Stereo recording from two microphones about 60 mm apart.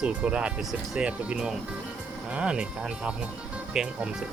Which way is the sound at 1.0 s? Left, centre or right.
Centre.